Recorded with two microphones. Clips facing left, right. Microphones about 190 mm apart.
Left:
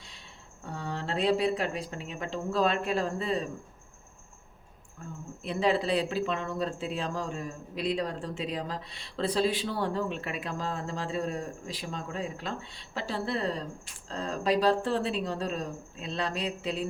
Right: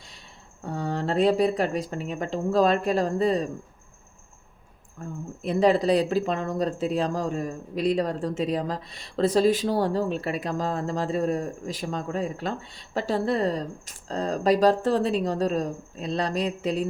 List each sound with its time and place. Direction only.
0.6 s speech: 45° right (ahead or behind)
5.4 s speech: 45° right (ahead or behind)